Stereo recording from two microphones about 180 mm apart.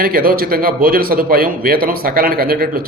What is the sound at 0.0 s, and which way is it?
Speech, 55° right (ahead or behind).